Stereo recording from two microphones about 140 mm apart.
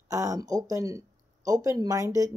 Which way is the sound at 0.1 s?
25° right (ahead or behind).